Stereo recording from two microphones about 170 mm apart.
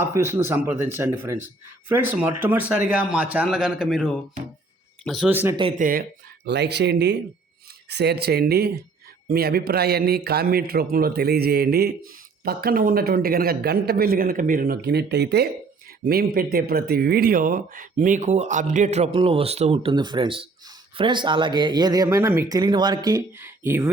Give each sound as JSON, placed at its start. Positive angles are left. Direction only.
{"t": 0.0, "sound": "a man's voice", "side_deg": -15}
{"t": 5.8, "sound": "speech", "side_deg": -60}
{"t": 7.9, "sound": "a man's voice", "side_deg": -75}
{"t": 16.0, "sound": "speech", "side_deg": -60}